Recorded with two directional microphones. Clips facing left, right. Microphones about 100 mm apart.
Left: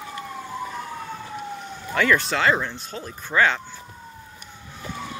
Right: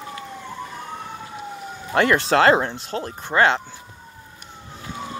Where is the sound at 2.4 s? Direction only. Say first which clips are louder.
Right 6 dB; 45° right (ahead or behind).